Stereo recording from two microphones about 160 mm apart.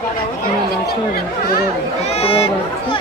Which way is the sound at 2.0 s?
40° left (ahead or behind).